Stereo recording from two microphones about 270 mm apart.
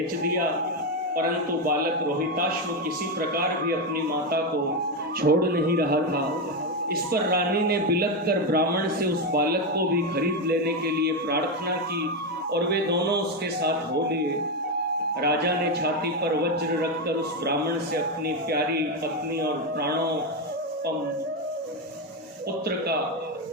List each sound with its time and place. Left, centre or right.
3.2 s a man's voice: right
12.5 s a man's voice: right
15.2 s a man's voice: right